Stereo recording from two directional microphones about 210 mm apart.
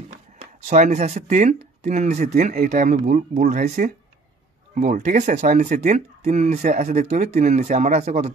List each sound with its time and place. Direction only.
0.4 s speech: 35° right (ahead or behind)